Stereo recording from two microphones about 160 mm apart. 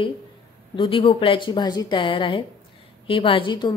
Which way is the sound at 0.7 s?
35° left (ahead or behind).